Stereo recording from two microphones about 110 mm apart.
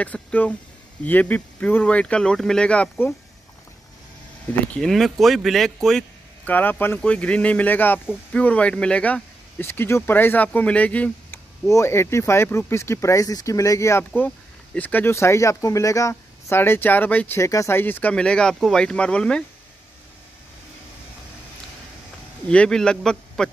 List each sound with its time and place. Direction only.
0.0 s speech: 15° left (ahead or behind)
4.7 s speech: centre (ahead or behind)
6.4 s speech: 15° left (ahead or behind)
17.4 s speech: 30° left (ahead or behind); by 19.4 s 10° left (ahead or behind)
22.5 s speech: 10° left (ahead or behind)